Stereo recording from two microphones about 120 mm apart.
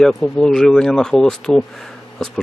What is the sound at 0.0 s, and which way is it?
Speech, 5° left (ahead or behind).